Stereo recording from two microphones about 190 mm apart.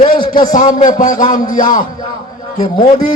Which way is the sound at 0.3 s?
45° left (ahead or behind).